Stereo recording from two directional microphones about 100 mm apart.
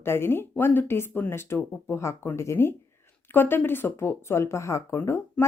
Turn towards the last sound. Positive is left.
turn(degrees=25)  # may be behind; listen again after turning